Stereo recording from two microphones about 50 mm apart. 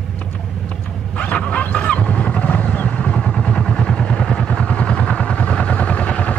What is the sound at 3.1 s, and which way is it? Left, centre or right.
Vehicle, centre.